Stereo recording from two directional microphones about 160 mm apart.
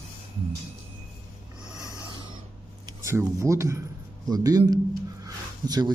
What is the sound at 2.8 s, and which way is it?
Speech, 20° right (ahead or behind).